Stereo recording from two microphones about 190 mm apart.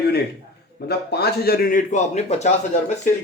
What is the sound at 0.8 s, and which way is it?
A man's voice, 60° left (ahead or behind).